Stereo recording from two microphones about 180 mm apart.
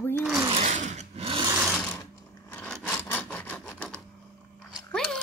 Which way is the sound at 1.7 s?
10° left (ahead or behind).